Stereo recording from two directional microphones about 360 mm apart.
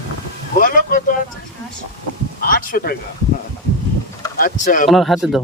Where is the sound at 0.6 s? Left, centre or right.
Left.